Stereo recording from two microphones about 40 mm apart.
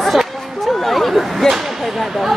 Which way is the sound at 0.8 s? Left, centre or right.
Centre.